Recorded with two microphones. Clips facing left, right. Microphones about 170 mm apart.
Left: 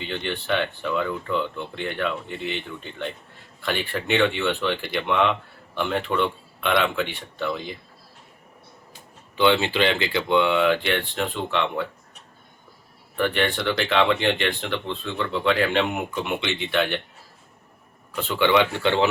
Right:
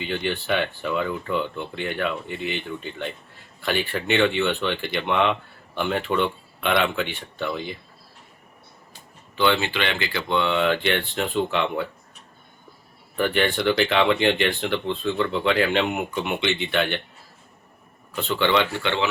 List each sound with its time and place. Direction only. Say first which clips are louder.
0.0 s speech: right 3 dB; 5° right (ahead or behind)
9.4 s speech: left 3 dB; 25° left (ahead or behind); by 11.9 s 5° right (ahead or behind)
13.1 s speech: right 1 dB; 5° right (ahead or behind)
18.3 s speech: left 2 dB; 10° left (ahead or behind)
18.7 s speech: left 4 dB; 35° left (ahead or behind)